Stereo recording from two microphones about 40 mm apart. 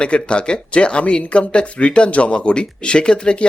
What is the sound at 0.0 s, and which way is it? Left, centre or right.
Speech, left.